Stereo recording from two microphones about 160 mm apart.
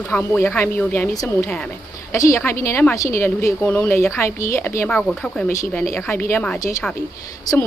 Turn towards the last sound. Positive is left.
turn(degrees=20)  # may be behind; listen again after turning